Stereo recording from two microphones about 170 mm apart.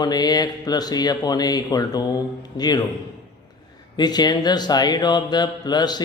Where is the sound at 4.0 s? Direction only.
25° left (ahead or behind).